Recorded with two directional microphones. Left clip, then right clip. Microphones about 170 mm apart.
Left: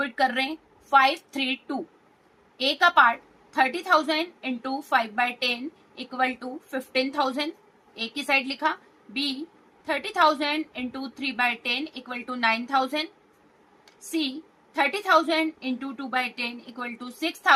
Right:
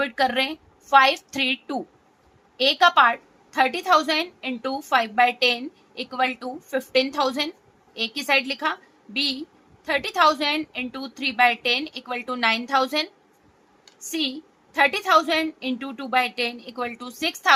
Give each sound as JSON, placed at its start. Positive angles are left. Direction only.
{"t": 0.0, "sound": "a woman's voice", "side_deg": -50}
{"t": 14.1, "sound": "a woman's voice", "side_deg": -50}